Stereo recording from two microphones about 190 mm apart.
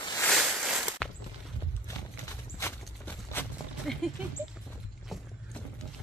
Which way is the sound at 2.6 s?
10° left (ahead or behind).